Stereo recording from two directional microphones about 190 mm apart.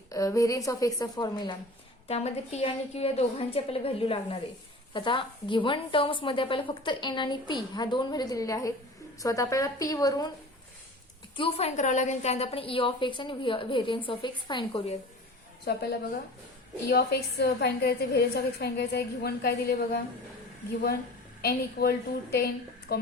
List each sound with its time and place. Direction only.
0.1 s a woman's voice: 15° left (ahead or behind)
2.0 s a woman's voice: 35° left (ahead or behind)
11.3 s a woman's voice: 30° left (ahead or behind)
15.6 s a woman's voice: 55° left (ahead or behind)
21.4 s a woman's voice: 55° left (ahead or behind)